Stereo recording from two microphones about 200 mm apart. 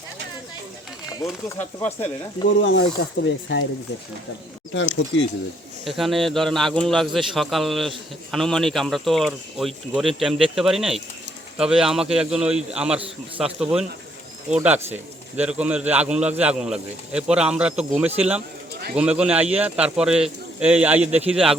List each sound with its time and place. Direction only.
1.1 s speech: 15° left (ahead or behind)
2.6 s speech: 65° left (ahead or behind)
4.7 s speech: 70° left (ahead or behind)
5.8 s a man's voice: centre (ahead or behind)